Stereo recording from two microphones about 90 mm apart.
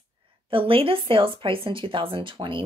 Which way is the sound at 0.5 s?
90° right.